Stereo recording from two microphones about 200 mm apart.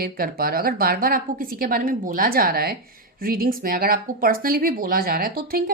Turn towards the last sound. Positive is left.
turn(degrees=-50)  # may be behind; listen again after turning